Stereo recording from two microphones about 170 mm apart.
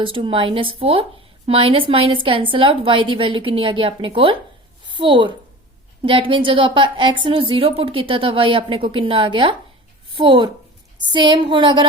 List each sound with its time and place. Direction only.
0.0 s a woman's voice: 30° right (ahead or behind)